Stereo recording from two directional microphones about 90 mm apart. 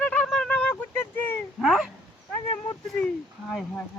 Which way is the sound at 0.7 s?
20° left (ahead or behind).